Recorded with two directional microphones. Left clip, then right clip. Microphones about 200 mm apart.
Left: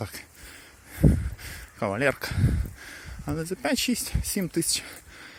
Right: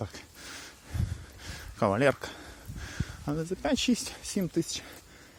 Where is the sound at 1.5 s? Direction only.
15° right (ahead or behind).